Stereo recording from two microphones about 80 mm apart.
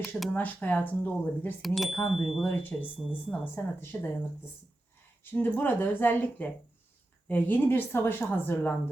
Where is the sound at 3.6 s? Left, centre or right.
Left.